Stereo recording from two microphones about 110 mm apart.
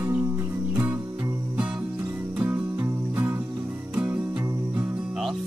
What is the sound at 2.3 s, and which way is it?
Music, 15° right (ahead or behind).